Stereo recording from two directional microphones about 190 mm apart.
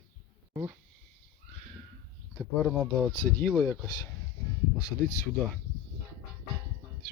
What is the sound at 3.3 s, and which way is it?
Speech, 10° left (ahead or behind).